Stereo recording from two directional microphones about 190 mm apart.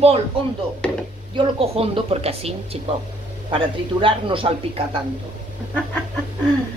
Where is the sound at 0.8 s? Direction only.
5° left (ahead or behind).